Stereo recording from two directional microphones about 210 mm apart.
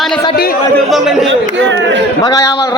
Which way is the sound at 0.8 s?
Centre (ahead or behind).